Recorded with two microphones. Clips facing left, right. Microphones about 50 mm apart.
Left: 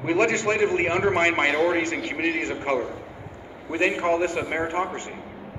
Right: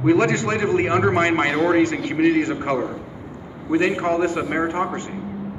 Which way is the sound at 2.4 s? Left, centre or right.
Left.